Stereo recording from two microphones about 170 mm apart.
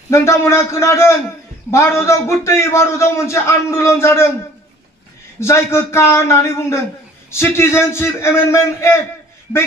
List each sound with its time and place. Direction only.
0.1 s a man's voice: 15° left (ahead or behind)
5.4 s a man's voice: 15° left (ahead or behind)